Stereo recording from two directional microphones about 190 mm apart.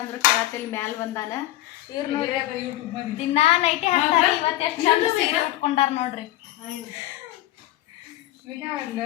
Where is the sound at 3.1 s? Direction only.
30° left (ahead or behind).